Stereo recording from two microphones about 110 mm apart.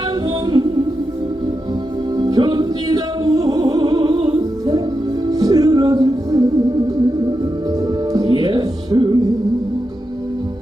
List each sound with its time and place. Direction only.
2.1 s music: 40° right (ahead or behind)